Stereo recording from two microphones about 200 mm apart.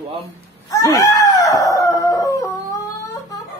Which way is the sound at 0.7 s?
15° left (ahead or behind).